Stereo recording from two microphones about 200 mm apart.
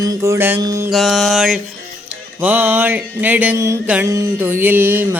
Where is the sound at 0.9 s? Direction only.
Centre (ahead or behind).